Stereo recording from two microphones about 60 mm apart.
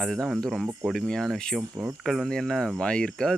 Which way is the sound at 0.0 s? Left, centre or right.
Centre.